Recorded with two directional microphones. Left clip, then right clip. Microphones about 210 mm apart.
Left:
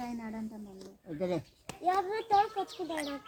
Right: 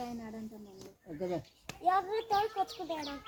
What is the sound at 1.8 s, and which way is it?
Speech, 20° right (ahead or behind).